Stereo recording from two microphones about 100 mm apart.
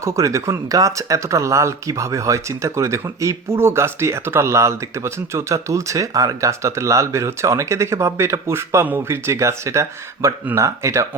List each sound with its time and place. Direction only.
0.0 s speech: 30° right (ahead or behind)